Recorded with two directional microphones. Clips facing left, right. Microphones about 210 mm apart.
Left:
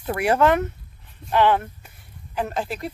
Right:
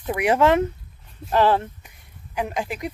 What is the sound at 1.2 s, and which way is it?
Speech, 40° right (ahead or behind).